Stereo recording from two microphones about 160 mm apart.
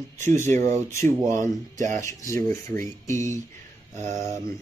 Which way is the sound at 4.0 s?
45° right (ahead or behind).